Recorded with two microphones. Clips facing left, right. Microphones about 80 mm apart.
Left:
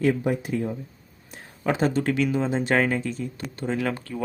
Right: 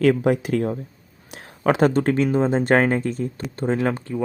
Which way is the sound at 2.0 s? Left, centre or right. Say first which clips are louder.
Right 4 dB; right.